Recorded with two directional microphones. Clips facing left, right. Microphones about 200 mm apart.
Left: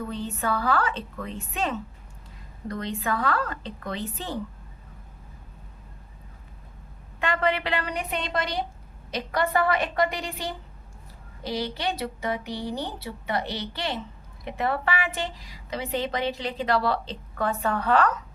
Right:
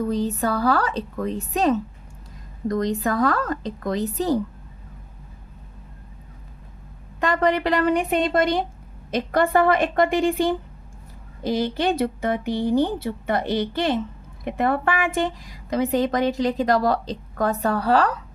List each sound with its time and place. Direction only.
0.1 s a woman's voice: 40° right (ahead or behind)
7.2 s a woman's voice: 40° right (ahead or behind)